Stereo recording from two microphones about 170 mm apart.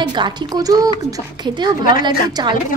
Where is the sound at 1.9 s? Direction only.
25° right (ahead or behind).